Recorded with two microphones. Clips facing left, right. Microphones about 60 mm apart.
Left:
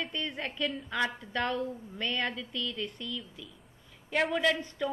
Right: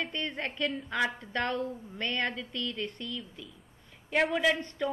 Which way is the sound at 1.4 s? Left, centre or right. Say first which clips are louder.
Even; right.